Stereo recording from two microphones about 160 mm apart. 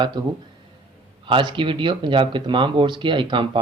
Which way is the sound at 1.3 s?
30° right (ahead or behind).